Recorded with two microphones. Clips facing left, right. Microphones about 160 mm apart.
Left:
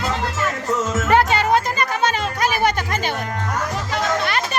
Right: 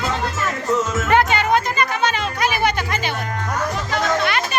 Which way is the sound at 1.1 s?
35° left (ahead or behind).